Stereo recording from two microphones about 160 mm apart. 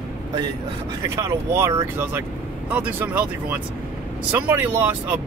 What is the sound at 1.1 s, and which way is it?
Speech, 15° right (ahead or behind).